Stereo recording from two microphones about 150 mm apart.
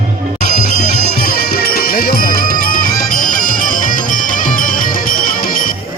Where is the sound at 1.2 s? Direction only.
80° left.